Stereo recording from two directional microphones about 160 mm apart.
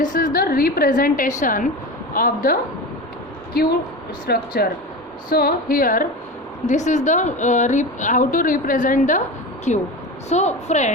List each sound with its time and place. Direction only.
0.0 s a woman's voice: 60° left (ahead or behind)
3.5 s a woman's voice: 80° left; by 6.1 s 60° left (ahead or behind)
6.7 s a woman's voice: 50° left (ahead or behind)